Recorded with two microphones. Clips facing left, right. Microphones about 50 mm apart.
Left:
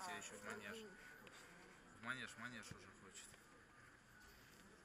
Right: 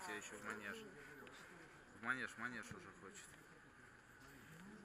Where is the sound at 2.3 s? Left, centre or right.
Right.